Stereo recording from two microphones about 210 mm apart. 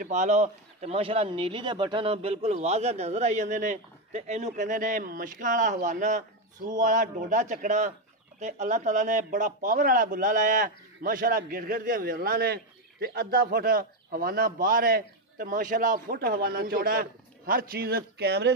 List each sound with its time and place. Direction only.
0.0 s a man's voice: 35° right (ahead or behind); by 18.5 s 50° right (ahead or behind)